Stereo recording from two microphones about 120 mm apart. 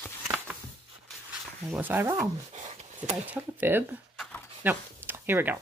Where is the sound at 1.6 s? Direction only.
10° right (ahead or behind).